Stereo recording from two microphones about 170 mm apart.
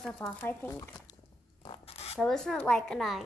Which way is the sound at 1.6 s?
35° left (ahead or behind).